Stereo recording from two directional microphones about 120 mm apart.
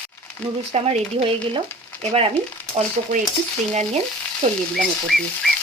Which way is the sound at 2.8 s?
60° right (ahead or behind).